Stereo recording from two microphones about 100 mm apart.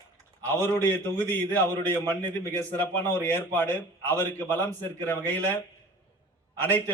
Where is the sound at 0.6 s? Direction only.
20° left (ahead or behind).